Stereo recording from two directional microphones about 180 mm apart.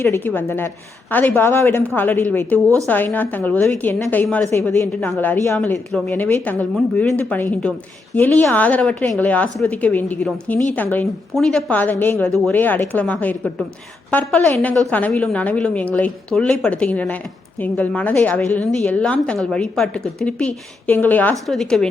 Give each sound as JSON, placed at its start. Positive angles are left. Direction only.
{"t": 0.0, "sound": "a woman's voice", "side_deg": 10}